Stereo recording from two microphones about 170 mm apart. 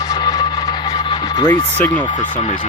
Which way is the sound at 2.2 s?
45° left (ahead or behind).